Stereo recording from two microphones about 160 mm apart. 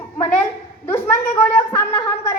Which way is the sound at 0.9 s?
15° left (ahead or behind).